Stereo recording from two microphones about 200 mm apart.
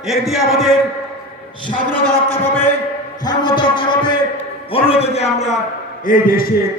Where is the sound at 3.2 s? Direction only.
20° left (ahead or behind).